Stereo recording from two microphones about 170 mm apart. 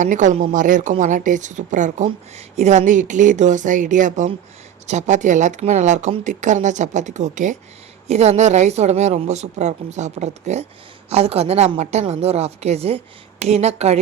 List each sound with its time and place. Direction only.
0.0 s a woman's voice: 45° right (ahead or behind)